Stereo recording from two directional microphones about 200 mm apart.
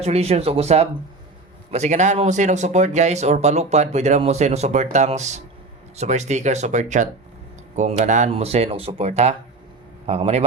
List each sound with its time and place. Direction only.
0.0 s speech: 30° right (ahead or behind)